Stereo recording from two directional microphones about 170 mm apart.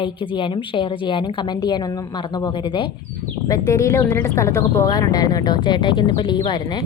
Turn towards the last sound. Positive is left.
turn(degrees=25)  # may be behind; listen again after turning